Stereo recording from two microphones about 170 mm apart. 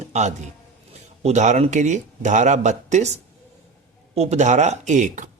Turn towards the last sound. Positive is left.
turn(degrees=-45)  # may be behind; listen again after turning